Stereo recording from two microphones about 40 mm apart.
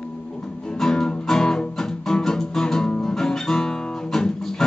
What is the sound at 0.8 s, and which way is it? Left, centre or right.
Music, centre.